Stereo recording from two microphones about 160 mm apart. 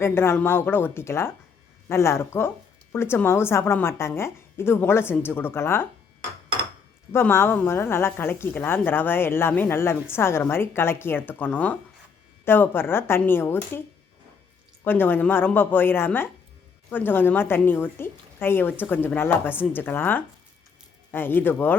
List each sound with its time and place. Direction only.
0.0 s a woman's voice: 15° left (ahead or behind)
7.1 s a woman's voice: 15° left (ahead or behind)
14.8 s a woman's voice: 15° left (ahead or behind)